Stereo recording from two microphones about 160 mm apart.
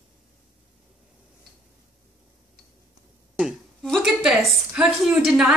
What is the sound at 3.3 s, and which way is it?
A woman's voice, centre (ahead or behind).